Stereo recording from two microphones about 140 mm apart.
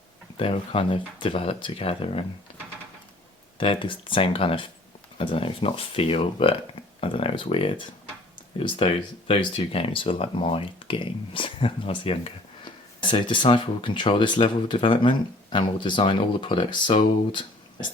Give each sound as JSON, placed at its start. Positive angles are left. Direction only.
{"t": 0.3, "sound": "speech", "side_deg": 40}
{"t": 3.6, "sound": "speech", "side_deg": 40}